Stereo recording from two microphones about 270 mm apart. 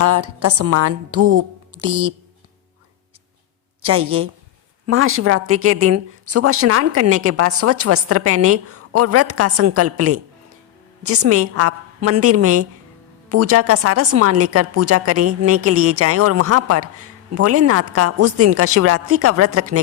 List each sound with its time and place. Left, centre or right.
0.0 s speech: right
3.8 s a woman's voice: right